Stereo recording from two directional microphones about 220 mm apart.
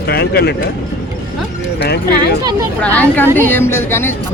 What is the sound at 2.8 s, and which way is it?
Speech, 5° left (ahead or behind).